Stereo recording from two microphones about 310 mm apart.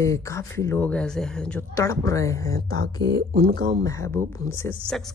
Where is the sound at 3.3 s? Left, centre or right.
Right.